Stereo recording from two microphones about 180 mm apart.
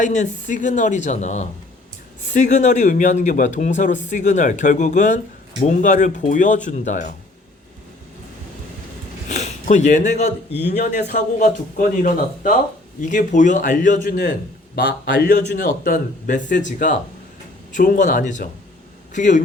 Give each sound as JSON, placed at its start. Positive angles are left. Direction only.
{"t": 0.0, "sound": "speech", "side_deg": 45}
{"t": 9.3, "sound": "speech", "side_deg": 40}